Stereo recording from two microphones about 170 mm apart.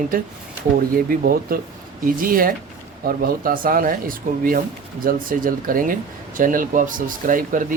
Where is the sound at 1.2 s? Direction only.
60° right (ahead or behind).